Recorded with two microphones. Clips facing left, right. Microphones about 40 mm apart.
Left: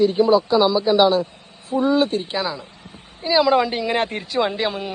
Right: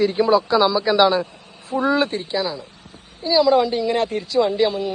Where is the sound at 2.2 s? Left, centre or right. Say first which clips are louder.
Right 1 dB; left.